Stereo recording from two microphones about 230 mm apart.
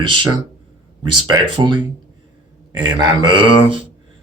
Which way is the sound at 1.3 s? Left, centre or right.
Centre.